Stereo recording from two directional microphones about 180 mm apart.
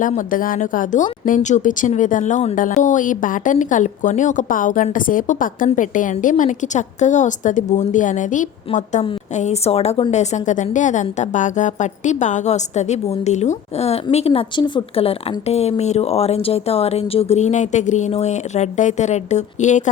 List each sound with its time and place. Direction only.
0.0 s a woman's voice: 45° left (ahead or behind)